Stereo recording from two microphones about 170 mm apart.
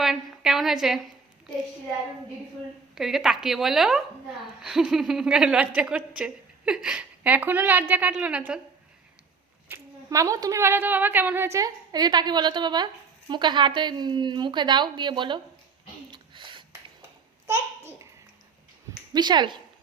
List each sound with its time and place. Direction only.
0.0 s a sound: centre (ahead or behind)
2.9 s speech: centre (ahead or behind)
9.6 s a woman's voice: 15° right (ahead or behind)
16.1 s a sound: 30° right (ahead or behind)
17.4 s babbling: 20° right (ahead or behind)
19.1 s a woman's voice: 25° right (ahead or behind)